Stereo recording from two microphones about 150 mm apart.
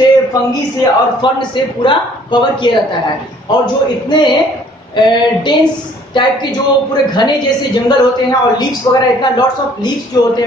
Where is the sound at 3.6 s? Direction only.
30° left (ahead or behind).